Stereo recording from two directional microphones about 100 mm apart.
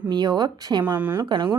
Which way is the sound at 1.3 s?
55° right (ahead or behind).